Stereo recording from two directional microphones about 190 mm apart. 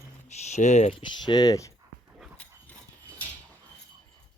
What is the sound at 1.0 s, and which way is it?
Speech, 25° left (ahead or behind).